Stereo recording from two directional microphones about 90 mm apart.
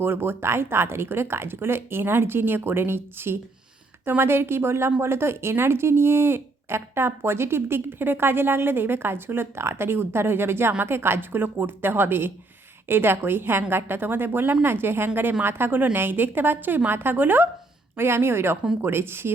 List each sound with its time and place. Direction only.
0.0 s speech: 25° right (ahead or behind)